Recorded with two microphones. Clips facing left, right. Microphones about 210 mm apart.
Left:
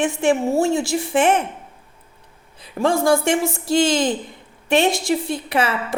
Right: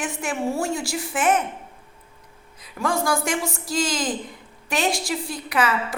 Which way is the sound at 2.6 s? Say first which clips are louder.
Left 6 dB; 25° left (ahead or behind).